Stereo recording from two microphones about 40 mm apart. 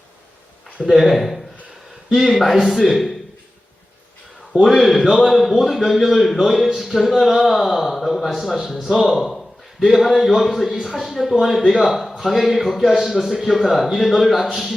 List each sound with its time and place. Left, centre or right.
0.9 s a man's voice: centre
4.6 s a man's voice: centre
5.0 s a man's voice: centre
5.3 s a man's voice: centre
9.8 s a man's voice: centre